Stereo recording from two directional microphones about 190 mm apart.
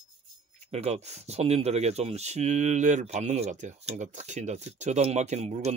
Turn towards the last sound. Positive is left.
turn(degrees=-35)  # may be behind; listen again after turning